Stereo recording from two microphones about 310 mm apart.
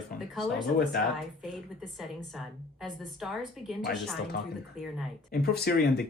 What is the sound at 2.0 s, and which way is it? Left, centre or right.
A woman's voice, centre.